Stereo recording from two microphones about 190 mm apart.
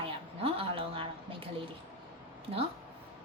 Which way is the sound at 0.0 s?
30° right (ahead or behind).